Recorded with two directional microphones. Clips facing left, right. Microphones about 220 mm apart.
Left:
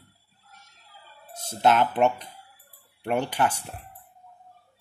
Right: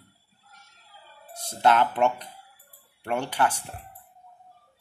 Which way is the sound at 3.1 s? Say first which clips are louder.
Left 1 dB; 10° left (ahead or behind).